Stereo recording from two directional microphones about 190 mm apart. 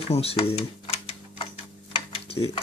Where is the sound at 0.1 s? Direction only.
30° left (ahead or behind).